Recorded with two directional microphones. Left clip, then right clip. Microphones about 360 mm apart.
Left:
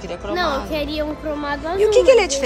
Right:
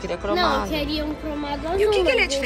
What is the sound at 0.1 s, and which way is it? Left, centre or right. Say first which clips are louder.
A woman's voice: even; centre.